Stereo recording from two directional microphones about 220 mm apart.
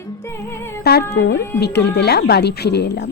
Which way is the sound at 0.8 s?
45° left (ahead or behind).